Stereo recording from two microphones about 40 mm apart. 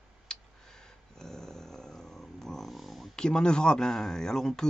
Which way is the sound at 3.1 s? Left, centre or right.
Left.